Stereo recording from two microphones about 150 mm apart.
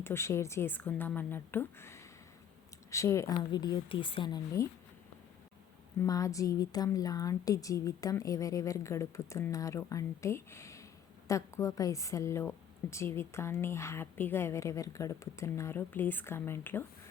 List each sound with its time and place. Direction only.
0.0 s a woman's voice: 15° left (ahead or behind); by 4.4 s 35° left (ahead or behind)
4.6 s a woman's voice: 20° left (ahead or behind)
6.0 s a woman's voice: 20° left (ahead or behind)